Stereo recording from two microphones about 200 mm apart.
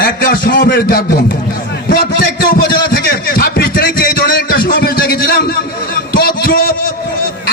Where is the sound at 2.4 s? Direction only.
50° left (ahead or behind).